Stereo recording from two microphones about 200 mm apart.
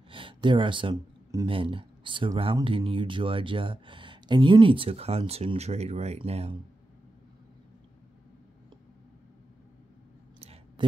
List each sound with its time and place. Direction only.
0.1 s speech: 25° right (ahead or behind)
10.4 s clicking: 30° right (ahead or behind)